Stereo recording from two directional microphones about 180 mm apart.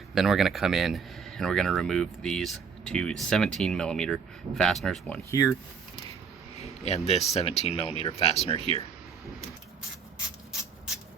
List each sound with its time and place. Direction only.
0.1 s speech: centre (ahead or behind)
5.3 s speech: 15° left (ahead or behind)
6.6 s speech: 35° left (ahead or behind)